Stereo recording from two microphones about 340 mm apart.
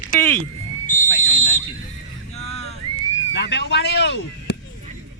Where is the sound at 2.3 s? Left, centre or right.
Centre.